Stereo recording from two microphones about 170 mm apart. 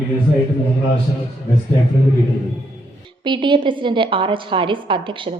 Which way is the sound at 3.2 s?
30° right (ahead or behind).